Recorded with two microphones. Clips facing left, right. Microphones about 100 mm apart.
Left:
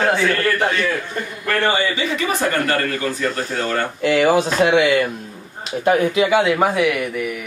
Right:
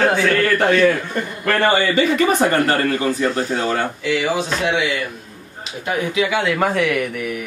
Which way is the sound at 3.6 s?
10° right (ahead or behind).